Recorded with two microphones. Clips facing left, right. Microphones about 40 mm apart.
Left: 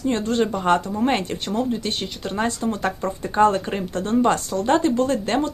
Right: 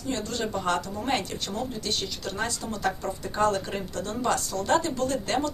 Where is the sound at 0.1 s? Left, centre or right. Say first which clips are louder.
Left 7 dB; left.